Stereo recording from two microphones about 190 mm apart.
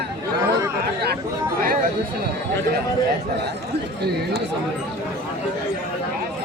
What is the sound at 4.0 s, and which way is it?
Speech, 55° right (ahead or behind).